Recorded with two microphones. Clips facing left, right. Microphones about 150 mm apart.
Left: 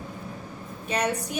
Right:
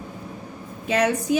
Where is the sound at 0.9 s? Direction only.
90° right.